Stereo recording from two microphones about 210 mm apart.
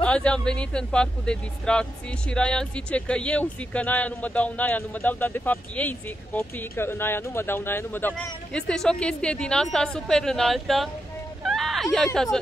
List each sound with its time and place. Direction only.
0.0 s speech: 5° left (ahead or behind)
11.4 s hubbub: centre (ahead or behind)